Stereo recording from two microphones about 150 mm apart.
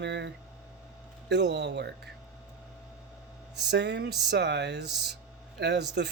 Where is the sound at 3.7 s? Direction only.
90° right.